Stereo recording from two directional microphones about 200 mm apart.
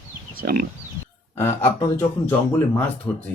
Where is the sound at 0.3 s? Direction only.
45° right (ahead or behind).